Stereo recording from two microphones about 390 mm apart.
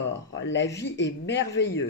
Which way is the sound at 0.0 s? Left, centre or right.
Left.